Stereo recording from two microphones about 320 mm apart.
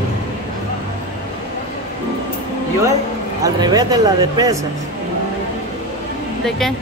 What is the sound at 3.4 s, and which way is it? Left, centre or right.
Speech, centre.